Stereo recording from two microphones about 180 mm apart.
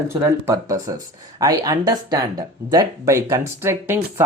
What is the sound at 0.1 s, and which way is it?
Speech, 15° right (ahead or behind).